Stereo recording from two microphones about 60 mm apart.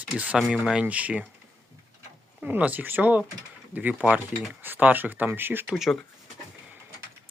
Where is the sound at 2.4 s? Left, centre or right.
Right.